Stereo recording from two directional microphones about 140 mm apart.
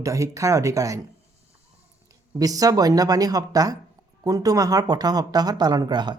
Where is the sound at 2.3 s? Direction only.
25° right (ahead or behind).